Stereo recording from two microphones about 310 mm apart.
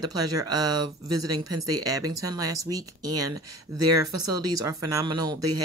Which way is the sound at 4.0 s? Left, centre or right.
Centre.